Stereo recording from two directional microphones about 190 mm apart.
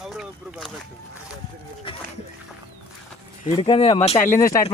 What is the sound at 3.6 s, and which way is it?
Speech, 25° left (ahead or behind).